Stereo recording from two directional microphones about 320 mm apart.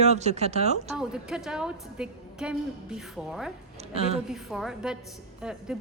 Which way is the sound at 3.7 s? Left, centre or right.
Centre.